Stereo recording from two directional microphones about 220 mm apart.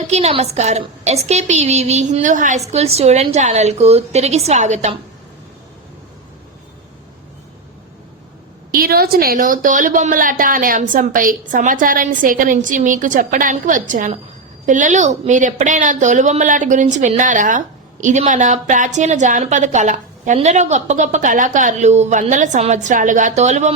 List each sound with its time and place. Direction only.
0.1 s a woman's voice: 25° right (ahead or behind)
8.7 s a woman's voice: 45° right (ahead or behind)